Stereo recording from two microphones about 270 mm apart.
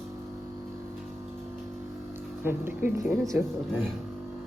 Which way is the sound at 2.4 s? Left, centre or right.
Centre.